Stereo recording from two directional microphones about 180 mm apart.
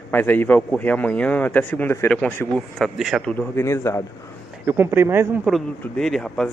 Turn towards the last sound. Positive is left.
turn(degrees=5)  # may be behind; listen again after turning